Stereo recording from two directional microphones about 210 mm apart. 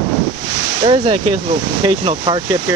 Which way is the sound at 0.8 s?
25° right (ahead or behind).